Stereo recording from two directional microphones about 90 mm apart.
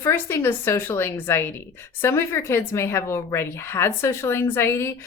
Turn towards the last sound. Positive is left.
turn(degrees=25)  # may be behind; listen again after turning